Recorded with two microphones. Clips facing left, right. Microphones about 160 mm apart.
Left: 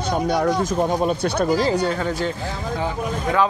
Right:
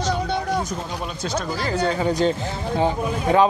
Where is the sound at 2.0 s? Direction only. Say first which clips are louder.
Right 4 dB; 15° right (ahead or behind).